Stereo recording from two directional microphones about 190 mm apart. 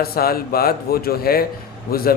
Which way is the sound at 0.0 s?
55° left (ahead or behind).